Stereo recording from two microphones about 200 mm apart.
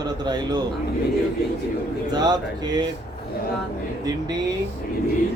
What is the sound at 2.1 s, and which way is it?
Speech, 20° right (ahead or behind).